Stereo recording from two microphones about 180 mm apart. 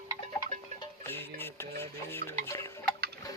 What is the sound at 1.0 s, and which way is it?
Stir, 10° left (ahead or behind).